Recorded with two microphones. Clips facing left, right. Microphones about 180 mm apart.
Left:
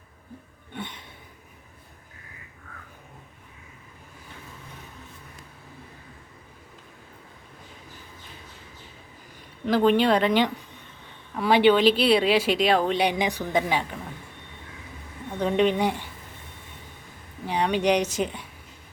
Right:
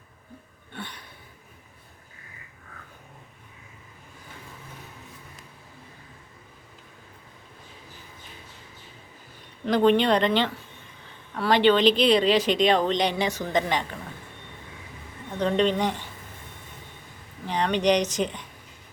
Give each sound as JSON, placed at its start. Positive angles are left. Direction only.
{"t": 0.7, "sound": "a sound", "side_deg": 20}
{"t": 9.6, "sound": "a woman's voice", "side_deg": 5}
{"t": 15.4, "sound": "speech", "side_deg": 10}
{"t": 17.4, "sound": "speech", "side_deg": 10}